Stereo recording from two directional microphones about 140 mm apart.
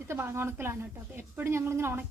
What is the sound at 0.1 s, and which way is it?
A woman's voice, 15° right (ahead or behind).